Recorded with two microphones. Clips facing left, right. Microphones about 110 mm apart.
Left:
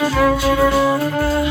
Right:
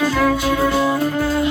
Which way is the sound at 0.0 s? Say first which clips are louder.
Left 2 dB; 10° left (ahead or behind).